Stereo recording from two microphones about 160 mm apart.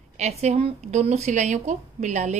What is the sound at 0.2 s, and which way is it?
A woman's voice, 45° right (ahead or behind).